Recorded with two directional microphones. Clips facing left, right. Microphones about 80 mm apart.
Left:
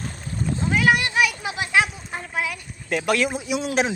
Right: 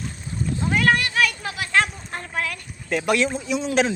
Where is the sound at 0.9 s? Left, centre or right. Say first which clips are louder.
Even; centre.